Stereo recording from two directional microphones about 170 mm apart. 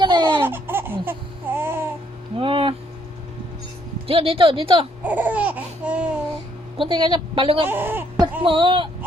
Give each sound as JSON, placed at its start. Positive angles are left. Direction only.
{"t": 0.0, "sound": "laughter", "side_deg": -25}
{"t": 0.4, "sound": "a sound", "side_deg": -10}
{"t": 2.4, "sound": "a sound", "side_deg": -30}
{"t": 4.0, "sound": "speech", "side_deg": -35}
{"t": 5.0, "sound": "laughter", "side_deg": -10}
{"t": 6.7, "sound": "a woman's voice", "side_deg": -25}
{"t": 7.7, "sound": "speech", "side_deg": -10}
{"t": 8.2, "sound": "a woman's voice", "side_deg": -30}